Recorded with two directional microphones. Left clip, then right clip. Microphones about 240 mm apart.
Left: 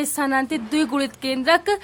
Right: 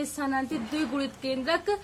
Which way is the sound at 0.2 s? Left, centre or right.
Left.